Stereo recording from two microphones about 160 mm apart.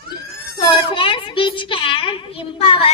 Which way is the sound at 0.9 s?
30° left (ahead or behind).